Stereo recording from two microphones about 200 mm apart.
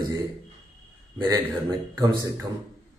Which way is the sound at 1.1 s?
20° right (ahead or behind).